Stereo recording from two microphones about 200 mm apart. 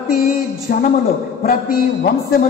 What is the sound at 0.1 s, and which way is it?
Music, 45° left (ahead or behind).